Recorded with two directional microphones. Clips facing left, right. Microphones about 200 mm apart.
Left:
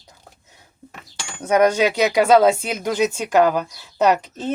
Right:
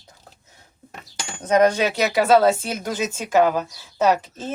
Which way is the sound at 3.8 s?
15° left (ahead or behind).